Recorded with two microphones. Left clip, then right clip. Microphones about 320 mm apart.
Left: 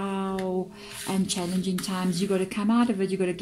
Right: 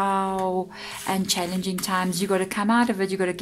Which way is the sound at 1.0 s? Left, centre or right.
Right.